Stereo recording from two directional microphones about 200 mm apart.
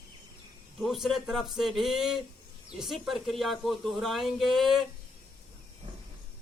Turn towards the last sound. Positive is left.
turn(degrees=0)  # may be behind; listen again after turning